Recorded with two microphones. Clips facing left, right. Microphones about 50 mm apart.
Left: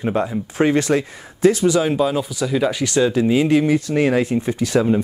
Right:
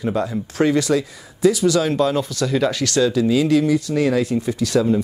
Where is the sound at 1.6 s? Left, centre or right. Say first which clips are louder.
Even; centre.